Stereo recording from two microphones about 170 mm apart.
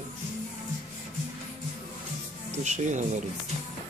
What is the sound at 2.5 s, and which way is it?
Speech, 45° right (ahead or behind).